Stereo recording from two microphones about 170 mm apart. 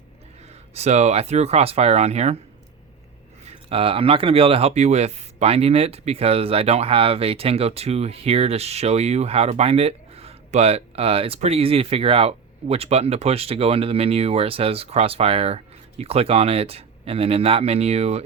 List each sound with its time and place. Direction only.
0.7 s speech: 40° right (ahead or behind)
3.4 s speech: 35° right (ahead or behind)